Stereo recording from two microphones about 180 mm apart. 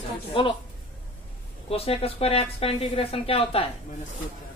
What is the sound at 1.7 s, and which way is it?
Speech, 35° left (ahead or behind).